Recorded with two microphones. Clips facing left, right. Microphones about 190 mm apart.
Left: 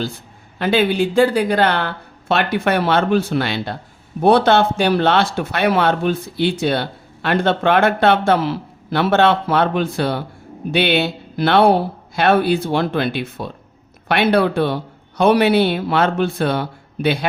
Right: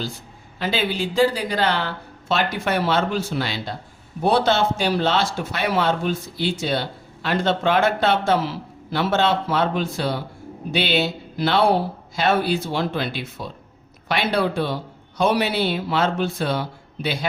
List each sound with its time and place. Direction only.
0.6 s speech: 55° left (ahead or behind)